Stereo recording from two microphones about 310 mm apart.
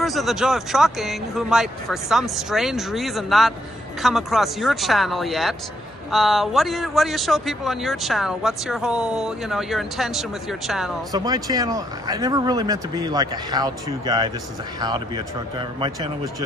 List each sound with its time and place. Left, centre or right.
0.0 s speech: centre
11.1 s speech: centre